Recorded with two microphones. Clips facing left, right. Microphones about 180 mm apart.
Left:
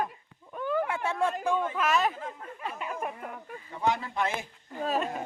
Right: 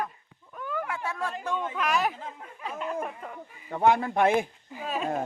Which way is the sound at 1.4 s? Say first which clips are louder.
Left 2 dB; 5° left (ahead or behind).